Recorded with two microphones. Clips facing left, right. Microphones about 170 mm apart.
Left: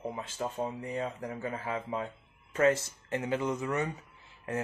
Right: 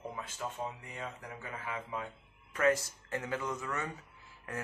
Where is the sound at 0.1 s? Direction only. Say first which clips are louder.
Left 5 dB; 30° left (ahead or behind).